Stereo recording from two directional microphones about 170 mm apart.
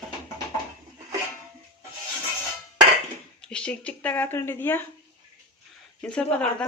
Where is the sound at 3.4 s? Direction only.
5° left (ahead or behind).